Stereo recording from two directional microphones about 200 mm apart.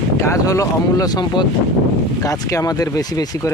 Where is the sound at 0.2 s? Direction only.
15° left (ahead or behind).